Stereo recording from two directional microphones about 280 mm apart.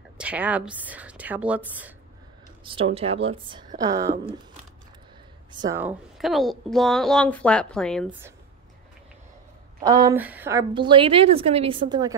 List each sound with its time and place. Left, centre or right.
0.2 s a woman's voice: centre
2.6 s a woman's voice: centre
5.7 s a woman's voice: centre
9.8 s a woman's voice: centre
10.7 s a woman's voice: centre